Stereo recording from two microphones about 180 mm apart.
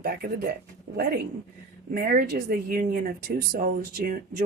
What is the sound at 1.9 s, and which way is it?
Speech, 55° right (ahead or behind).